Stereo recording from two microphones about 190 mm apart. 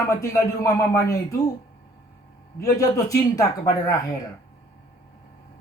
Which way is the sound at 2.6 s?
20° left (ahead or behind).